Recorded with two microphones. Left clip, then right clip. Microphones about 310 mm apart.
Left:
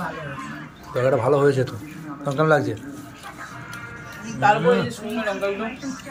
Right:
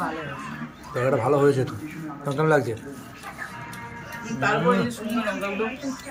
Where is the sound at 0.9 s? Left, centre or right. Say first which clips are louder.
Left 3 dB; centre.